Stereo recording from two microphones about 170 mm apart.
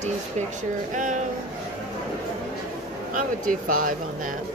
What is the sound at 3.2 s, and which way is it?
Speech, 50° right (ahead or behind).